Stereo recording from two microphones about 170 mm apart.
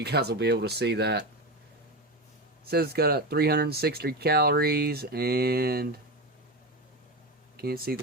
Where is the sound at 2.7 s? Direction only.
65° right (ahead or behind).